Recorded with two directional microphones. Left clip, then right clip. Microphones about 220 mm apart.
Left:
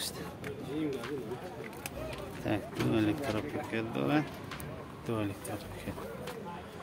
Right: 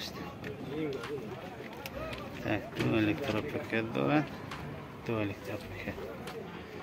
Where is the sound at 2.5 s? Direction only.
5° left (ahead or behind).